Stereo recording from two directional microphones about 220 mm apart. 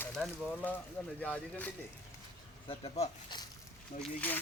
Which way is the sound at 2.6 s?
25° left (ahead or behind).